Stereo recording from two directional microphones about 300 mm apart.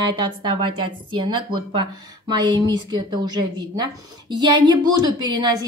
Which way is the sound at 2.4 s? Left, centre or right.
Centre.